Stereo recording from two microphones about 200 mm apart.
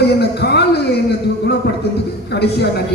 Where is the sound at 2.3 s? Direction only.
55° left (ahead or behind).